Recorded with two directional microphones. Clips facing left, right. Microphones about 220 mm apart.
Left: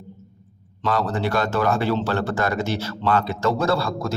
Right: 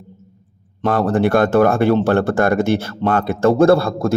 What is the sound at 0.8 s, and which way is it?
A man's voice, 55° right (ahead or behind).